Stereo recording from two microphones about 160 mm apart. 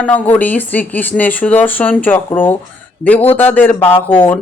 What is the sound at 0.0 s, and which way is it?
Speech, 10° left (ahead or behind).